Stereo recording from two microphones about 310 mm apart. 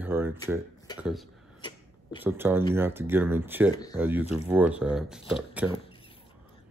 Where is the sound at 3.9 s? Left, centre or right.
Centre.